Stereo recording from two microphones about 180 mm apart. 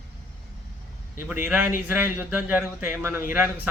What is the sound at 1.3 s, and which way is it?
A man's voice, 10° right (ahead or behind).